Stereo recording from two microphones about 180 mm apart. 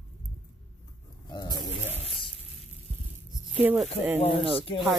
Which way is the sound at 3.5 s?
10° right (ahead or behind).